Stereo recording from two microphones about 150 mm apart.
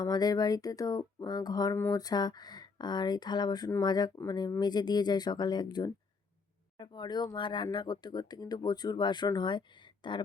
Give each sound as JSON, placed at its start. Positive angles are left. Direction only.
{"t": 0.0, "sound": "speech", "side_deg": 25}